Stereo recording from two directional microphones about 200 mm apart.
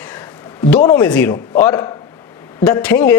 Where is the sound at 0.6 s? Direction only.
15° left (ahead or behind).